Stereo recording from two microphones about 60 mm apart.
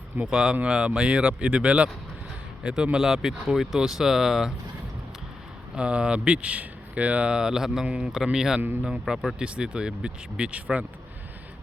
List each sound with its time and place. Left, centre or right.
0.3 s speech: centre
5.7 s speech: centre